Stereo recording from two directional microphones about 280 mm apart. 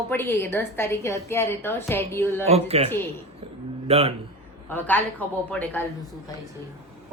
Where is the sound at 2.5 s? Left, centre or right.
Right.